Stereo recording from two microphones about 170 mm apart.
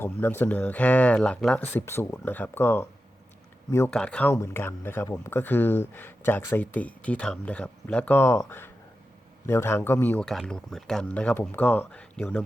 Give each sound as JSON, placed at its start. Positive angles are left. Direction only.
{"t": 0.0, "sound": "speech", "side_deg": 15}